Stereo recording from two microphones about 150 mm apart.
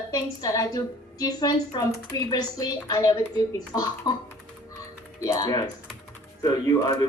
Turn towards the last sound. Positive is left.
turn(degrees=25)  # may be behind; listen again after turning